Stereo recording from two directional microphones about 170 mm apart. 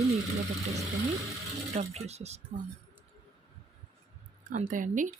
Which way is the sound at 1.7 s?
40° right (ahead or behind).